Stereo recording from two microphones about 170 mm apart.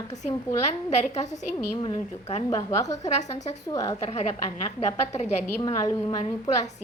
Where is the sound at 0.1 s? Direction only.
40° left (ahead or behind).